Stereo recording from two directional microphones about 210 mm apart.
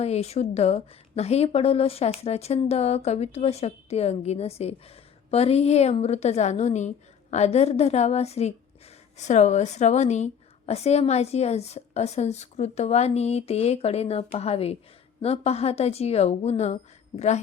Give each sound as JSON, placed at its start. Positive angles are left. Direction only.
{"t": 0.0, "sound": "a woman's voice", "side_deg": 30}